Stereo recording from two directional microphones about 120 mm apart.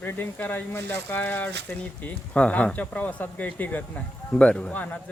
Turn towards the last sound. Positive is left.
turn(degrees=10)  # may be behind; listen again after turning